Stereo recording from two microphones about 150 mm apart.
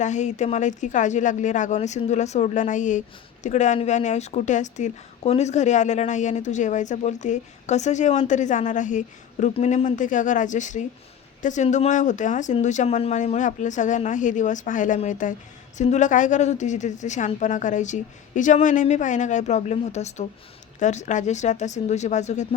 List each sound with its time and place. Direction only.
0.0 s speech: 50° left (ahead or behind)